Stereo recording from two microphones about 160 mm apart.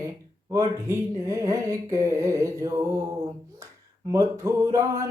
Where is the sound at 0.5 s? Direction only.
20° right (ahead or behind).